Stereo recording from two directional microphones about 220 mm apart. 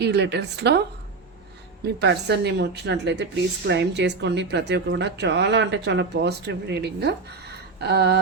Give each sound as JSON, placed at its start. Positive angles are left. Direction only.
{"t": 0.0, "sound": "a woman's voice", "side_deg": -50}